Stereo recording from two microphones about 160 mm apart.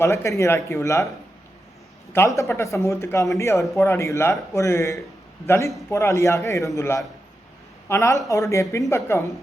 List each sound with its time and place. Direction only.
0.0 s speech: 15° left (ahead or behind)
2.1 s a woman's voice: 20° left (ahead or behind)